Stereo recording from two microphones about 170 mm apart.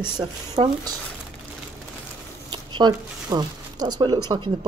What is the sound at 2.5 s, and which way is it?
Speech, 25° right (ahead or behind).